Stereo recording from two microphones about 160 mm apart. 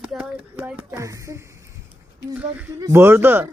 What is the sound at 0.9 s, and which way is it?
Speech, 20° right (ahead or behind).